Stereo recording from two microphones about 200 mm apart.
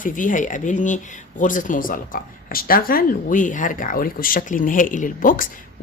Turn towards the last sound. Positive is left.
turn(degrees=45)  # may be behind; listen again after turning